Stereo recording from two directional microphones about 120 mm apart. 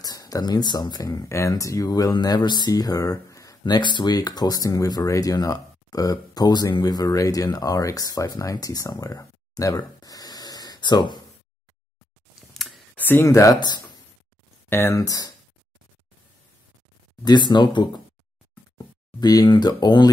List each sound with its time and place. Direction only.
0.0 s speech: 30° left (ahead or behind)
12.4 s a sound: centre (ahead or behind)
12.9 s speech: 15° left (ahead or behind); by 13.9 s 35° left (ahead or behind)
14.7 s speech: 20° left (ahead or behind)
17.2 s speech: 35° left (ahead or behind)